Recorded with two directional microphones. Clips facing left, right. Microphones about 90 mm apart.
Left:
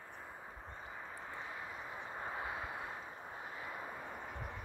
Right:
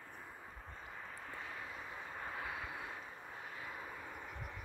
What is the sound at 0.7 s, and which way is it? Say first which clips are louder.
Vehicle: left 2 dB; 10° left (ahead or behind).